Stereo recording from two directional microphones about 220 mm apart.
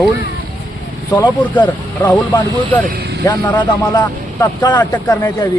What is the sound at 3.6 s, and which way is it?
Speech, 20° left (ahead or behind).